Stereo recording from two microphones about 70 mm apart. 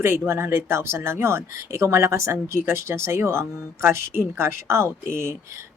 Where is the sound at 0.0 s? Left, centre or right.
Right.